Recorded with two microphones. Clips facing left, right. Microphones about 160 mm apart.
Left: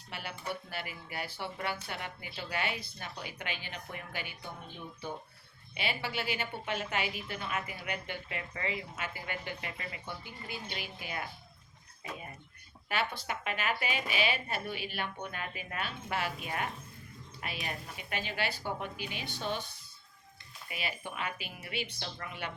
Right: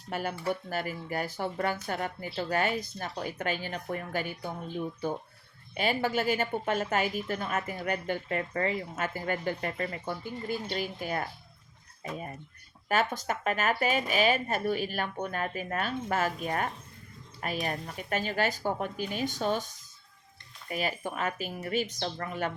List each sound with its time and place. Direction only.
0.1 s a woman's voice: 45° right (ahead or behind)
5.7 s a woman's voice: 45° right (ahead or behind)
12.9 s a woman's voice: 45° right (ahead or behind)